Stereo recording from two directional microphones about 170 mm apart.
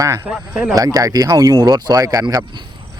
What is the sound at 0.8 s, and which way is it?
Speech, 20° right (ahead or behind).